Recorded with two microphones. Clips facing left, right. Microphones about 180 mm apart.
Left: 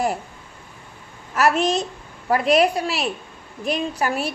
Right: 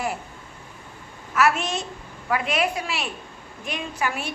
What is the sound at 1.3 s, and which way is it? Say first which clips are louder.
A woman's voice: left 3 dB; 35° left (ahead or behind).